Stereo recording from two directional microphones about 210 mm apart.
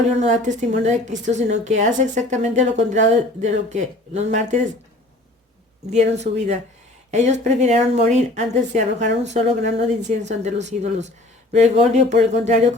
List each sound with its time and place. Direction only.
0.2 s a woman's voice: 35° right (ahead or behind)
5.9 s a woman's voice: 35° right (ahead or behind)